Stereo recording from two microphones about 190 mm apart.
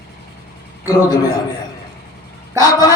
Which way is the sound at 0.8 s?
20° left (ahead or behind).